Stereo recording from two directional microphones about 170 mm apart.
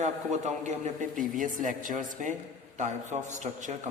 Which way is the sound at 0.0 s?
45° right (ahead or behind).